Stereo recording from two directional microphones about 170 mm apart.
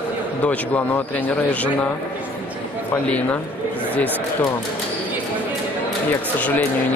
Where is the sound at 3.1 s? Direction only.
10° left (ahead or behind).